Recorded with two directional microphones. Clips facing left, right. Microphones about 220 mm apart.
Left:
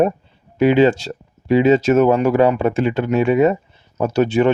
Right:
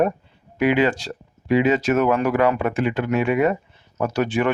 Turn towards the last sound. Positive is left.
turn(degrees=25)  # may be behind; listen again after turning